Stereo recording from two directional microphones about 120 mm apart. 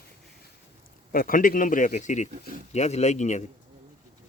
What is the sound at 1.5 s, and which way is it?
Speech, 90° left.